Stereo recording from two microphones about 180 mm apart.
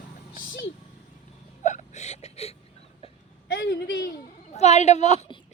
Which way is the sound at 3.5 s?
60° left (ahead or behind).